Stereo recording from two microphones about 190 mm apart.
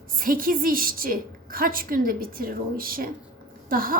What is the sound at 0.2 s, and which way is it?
A woman's voice, 50° right (ahead or behind).